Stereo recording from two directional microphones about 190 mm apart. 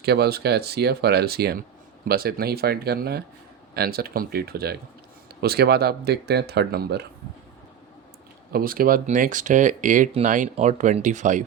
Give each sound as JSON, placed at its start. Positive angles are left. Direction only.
{"t": 0.0, "sound": "speech", "side_deg": -55}
{"t": 8.5, "sound": "speech", "side_deg": -50}